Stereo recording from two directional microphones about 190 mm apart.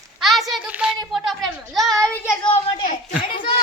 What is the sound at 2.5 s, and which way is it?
Speech, 30° left (ahead or behind).